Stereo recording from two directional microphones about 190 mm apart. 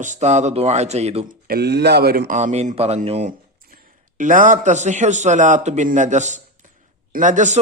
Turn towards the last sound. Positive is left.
turn(degrees=-40)  # may be behind; listen again after turning